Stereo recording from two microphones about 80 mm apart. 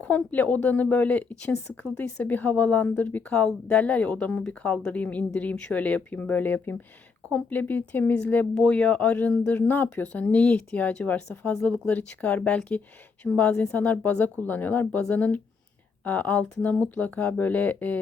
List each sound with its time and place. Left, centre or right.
0.0 s speech: centre